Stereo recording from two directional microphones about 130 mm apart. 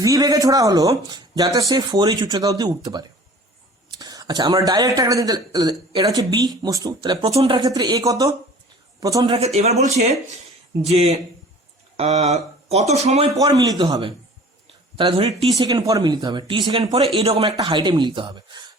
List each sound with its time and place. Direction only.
0.0 s speech: 25° right (ahead or behind)
7.0 s speech: 40° right (ahead or behind)
7.5 s a man's voice: 30° right (ahead or behind)
9.6 s speech: 55° right (ahead or behind)
13.3 s speech: 30° right (ahead or behind)
14.9 s a man's voice: 45° right (ahead or behind)
15.5 s speech: 30° right (ahead or behind)
16.8 s a man's voice: 50° right (ahead or behind)
17.6 s speech: 35° right (ahead or behind)